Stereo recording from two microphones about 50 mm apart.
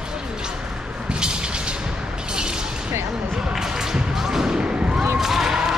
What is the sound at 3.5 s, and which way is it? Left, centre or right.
Basketball bounce, centre.